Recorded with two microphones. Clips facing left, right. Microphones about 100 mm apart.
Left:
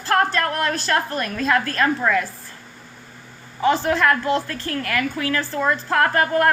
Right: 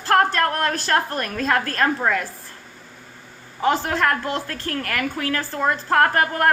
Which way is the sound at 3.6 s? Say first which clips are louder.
Left 2 dB; 45° right (ahead or behind).